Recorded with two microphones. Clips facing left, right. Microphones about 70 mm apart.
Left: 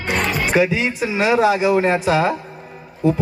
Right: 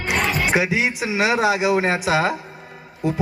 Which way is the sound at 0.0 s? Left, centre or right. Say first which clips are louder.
Left 1 dB; centre.